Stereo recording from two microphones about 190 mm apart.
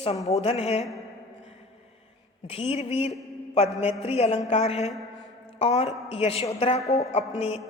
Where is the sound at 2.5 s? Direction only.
30° left (ahead or behind).